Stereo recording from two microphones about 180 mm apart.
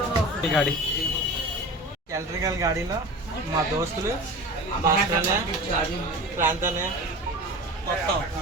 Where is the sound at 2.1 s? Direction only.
15° right (ahead or behind).